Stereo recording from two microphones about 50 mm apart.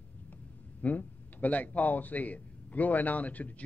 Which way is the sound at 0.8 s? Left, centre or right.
Left.